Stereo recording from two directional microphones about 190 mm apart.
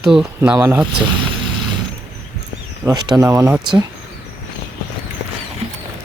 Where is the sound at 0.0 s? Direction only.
5° right (ahead or behind).